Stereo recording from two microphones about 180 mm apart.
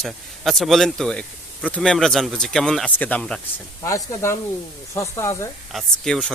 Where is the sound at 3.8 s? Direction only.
15° left (ahead or behind).